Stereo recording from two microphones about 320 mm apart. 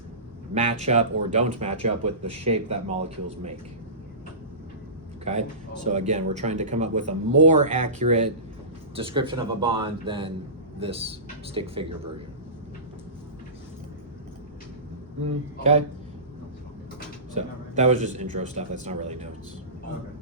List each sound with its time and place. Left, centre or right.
0.5 s speech: centre
5.2 s speech: right
17.4 s speech: right